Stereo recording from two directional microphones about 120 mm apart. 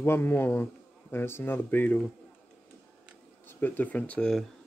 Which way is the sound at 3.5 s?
15° left (ahead or behind).